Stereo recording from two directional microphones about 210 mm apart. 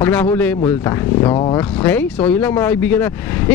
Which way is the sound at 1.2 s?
25° left (ahead or behind).